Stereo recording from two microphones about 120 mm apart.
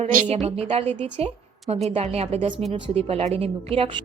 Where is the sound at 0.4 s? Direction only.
55° right (ahead or behind).